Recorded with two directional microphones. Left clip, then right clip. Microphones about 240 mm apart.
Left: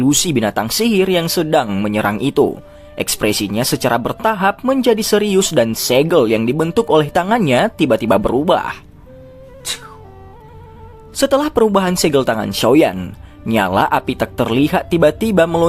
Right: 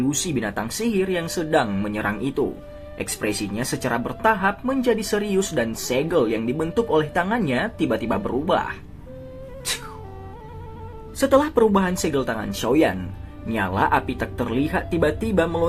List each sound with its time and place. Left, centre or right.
0.1 s speech: left
11.2 s speech: left